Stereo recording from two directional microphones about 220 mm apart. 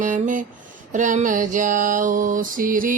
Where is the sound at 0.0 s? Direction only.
35° right (ahead or behind).